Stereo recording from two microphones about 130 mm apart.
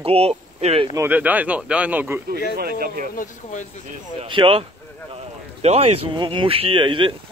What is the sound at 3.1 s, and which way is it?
Speech, 80° left.